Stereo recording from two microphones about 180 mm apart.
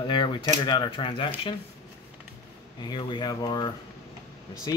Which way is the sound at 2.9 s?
25° left (ahead or behind).